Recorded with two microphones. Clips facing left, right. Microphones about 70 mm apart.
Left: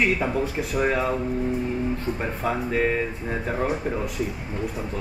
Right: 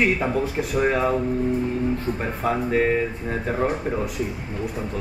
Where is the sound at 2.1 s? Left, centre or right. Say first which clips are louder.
Right 2 dB; centre.